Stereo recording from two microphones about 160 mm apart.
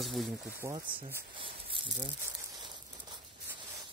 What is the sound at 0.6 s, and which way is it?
Speech, 20° right (ahead or behind).